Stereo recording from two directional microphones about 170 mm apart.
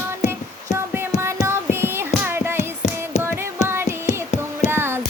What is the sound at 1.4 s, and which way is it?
Music, 15° right (ahead or behind).